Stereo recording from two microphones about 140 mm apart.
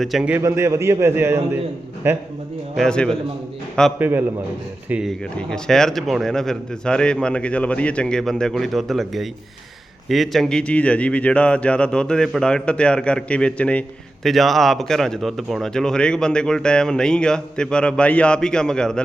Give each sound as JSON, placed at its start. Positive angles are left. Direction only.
{"t": 0.0, "sound": "speech", "side_deg": -5}
{"t": 0.3, "sound": "a man's voice", "side_deg": -20}
{"t": 2.7, "sound": "speech", "side_deg": 5}
{"t": 3.9, "sound": "speech", "side_deg": -15}
{"t": 5.2, "sound": "a man's voice", "side_deg": 5}